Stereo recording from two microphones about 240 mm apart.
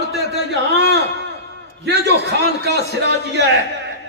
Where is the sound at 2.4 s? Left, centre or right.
Right.